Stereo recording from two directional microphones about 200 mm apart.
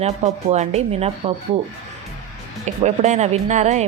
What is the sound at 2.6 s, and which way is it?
Speech, 35° right (ahead or behind).